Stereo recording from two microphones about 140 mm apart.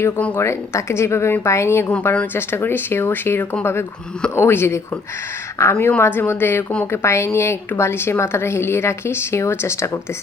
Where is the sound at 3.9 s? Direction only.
5° left (ahead or behind).